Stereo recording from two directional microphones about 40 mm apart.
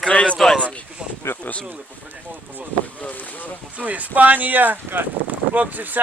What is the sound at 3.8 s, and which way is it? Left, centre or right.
Speech, right.